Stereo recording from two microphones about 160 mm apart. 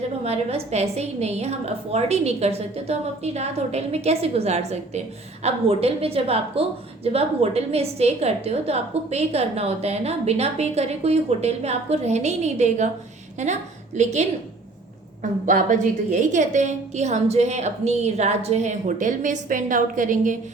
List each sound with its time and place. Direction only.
0.3 s a woman's voice: 40° right (ahead or behind)